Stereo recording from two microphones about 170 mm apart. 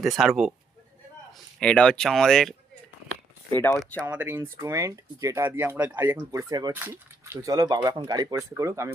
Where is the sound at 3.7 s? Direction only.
5° left (ahead or behind).